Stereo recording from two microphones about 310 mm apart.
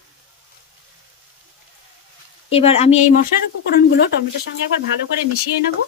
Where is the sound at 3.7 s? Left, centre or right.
Left.